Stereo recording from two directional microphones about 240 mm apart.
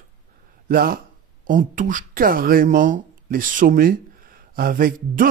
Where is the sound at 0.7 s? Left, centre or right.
Right.